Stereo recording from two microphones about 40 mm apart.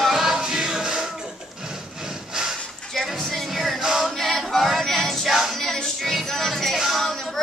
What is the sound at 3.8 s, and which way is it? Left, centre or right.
Choir, centre.